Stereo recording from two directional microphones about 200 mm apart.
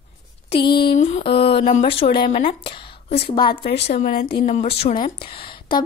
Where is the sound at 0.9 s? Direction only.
35° left (ahead or behind).